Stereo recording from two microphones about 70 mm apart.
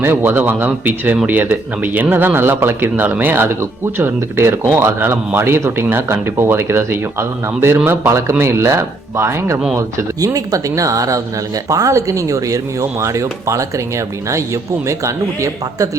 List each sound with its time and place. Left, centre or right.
0.0 s speech: right
9.7 s speech: right